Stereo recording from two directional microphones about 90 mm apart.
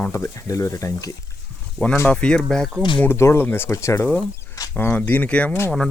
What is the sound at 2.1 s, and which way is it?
Speech, 10° left (ahead or behind).